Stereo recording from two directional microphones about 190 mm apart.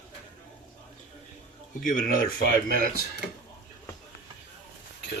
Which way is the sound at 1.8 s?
45° left (ahead or behind).